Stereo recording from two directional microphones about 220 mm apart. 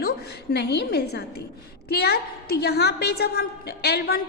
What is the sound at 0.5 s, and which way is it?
A woman's voice, 50° left (ahead or behind).